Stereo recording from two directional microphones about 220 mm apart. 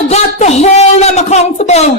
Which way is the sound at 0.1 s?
30° left (ahead or behind).